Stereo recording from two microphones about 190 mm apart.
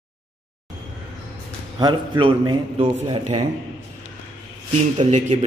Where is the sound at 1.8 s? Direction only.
25° right (ahead or behind).